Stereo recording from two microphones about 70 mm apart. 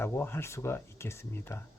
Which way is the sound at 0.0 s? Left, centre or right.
Left.